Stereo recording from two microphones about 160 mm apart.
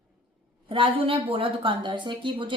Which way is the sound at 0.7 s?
35° right (ahead or behind).